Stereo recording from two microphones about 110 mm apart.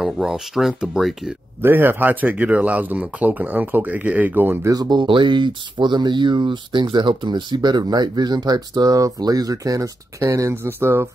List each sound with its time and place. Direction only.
0.0 s speech: 5° right (ahead or behind)
1.6 s speech: 20° right (ahead or behind)
4.6 s speech: 35° right (ahead or behind); by 11.1 s 20° right (ahead or behind)